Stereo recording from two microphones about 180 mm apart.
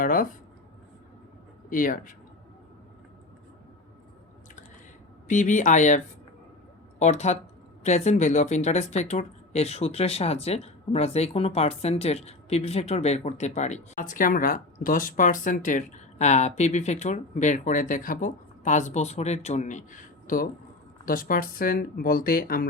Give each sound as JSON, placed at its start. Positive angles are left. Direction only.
{"t": 0.0, "sound": "speech", "side_deg": 50}
{"t": 1.7, "sound": "speech", "side_deg": 50}
{"t": 5.3, "sound": "speech", "side_deg": 45}
{"t": 7.0, "sound": "speech", "side_deg": 40}